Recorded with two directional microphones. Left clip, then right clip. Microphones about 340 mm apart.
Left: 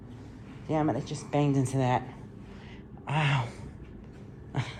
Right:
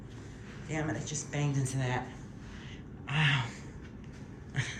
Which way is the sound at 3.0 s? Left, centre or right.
Centre.